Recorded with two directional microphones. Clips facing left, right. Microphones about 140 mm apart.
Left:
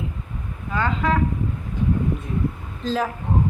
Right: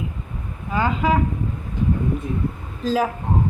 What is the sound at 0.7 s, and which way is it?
Speech, 10° right (ahead or behind).